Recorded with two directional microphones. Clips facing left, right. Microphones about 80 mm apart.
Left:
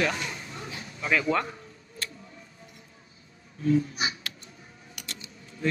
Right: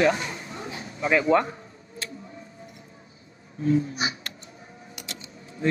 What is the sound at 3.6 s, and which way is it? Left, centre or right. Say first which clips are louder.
Speech: right 1 dB; right.